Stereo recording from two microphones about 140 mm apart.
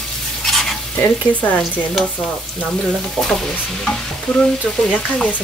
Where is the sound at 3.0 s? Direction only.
5° left (ahead or behind).